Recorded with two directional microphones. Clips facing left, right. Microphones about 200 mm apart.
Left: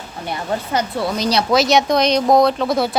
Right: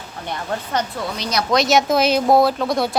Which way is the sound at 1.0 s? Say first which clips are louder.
Left 5 dB; 35° left (ahead or behind).